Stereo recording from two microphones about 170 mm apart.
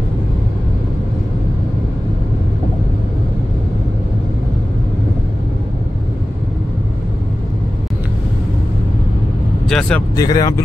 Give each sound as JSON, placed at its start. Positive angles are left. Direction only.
{"t": 9.7, "sound": "speech", "side_deg": 5}
{"t": 10.1, "sound": "speech", "side_deg": 20}